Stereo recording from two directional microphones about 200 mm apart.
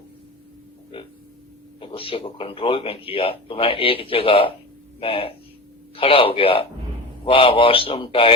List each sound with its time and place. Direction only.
0.9 s speech: 25° left (ahead or behind)